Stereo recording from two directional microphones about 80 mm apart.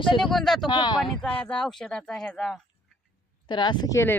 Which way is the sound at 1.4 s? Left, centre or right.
Centre.